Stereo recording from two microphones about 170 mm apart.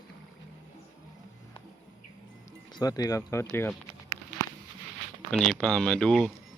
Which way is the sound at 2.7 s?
20° left (ahead or behind).